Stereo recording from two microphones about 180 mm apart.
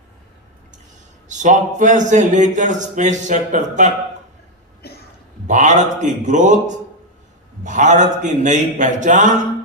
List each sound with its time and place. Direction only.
1.3 s a man's voice: 45° right (ahead or behind)
4.8 s a sound: 60° left (ahead or behind)
5.5 s a man's voice: 45° right (ahead or behind)